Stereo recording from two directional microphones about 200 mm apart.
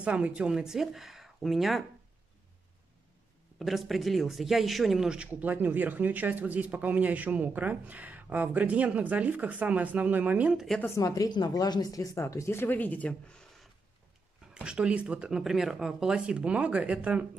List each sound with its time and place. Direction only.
0.0 s speech: 5° right (ahead or behind)
3.5 s a man's voice: centre (ahead or behind)
10.8 s speech: 15° left (ahead or behind)
14.5 s speech: 5° right (ahead or behind)